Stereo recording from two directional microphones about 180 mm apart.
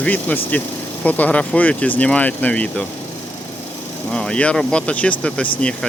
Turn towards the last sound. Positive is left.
turn(degrees=5)  # may be behind; listen again after turning